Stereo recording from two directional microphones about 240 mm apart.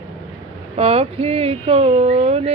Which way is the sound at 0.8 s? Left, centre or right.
Right.